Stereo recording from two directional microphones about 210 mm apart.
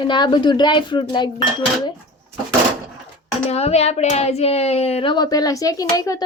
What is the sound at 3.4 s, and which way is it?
A woman's voice, 30° left (ahead or behind).